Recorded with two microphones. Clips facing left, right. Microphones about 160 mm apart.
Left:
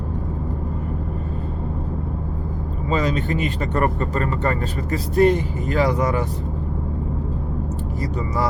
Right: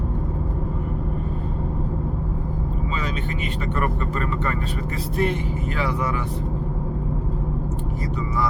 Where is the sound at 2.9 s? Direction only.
40° left (ahead or behind).